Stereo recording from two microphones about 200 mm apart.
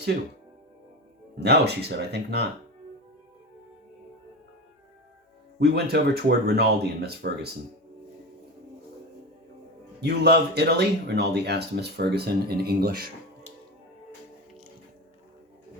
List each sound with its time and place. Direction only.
1.4 s speech: 55° right (ahead or behind)
5.5 s speech: 55° right (ahead or behind)
10.0 s speech: 55° right (ahead or behind)